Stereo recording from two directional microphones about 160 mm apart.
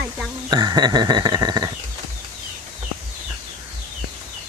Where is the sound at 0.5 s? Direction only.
25° right (ahead or behind).